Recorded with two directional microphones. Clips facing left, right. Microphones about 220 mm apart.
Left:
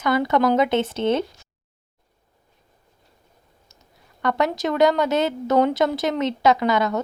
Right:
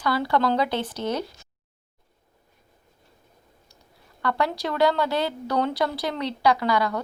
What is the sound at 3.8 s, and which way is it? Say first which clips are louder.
A woman's voice: left 3 dB; 20° left (ahead or behind).